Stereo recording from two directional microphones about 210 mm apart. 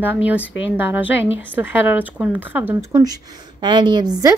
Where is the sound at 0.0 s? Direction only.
10° right (ahead or behind).